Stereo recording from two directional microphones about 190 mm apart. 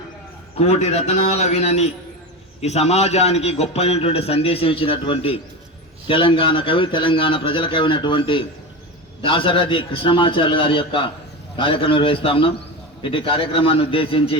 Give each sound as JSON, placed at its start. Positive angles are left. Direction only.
{"t": 0.6, "sound": "a man's voice", "side_deg": 35}